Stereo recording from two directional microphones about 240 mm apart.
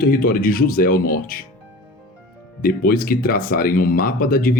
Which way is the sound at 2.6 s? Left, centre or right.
Left.